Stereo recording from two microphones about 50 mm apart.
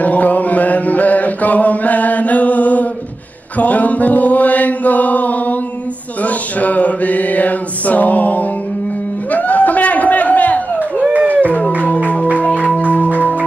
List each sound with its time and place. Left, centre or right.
0.0 s chant: left
6.2 s mantra: left
9.3 s a sound: left
12.7 s music: left